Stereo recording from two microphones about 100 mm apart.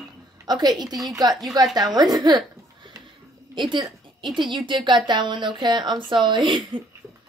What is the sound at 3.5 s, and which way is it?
A woman's voice, 50° right (ahead or behind).